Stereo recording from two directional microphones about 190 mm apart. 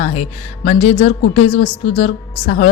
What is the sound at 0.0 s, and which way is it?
A woman's voice, 35° left (ahead or behind).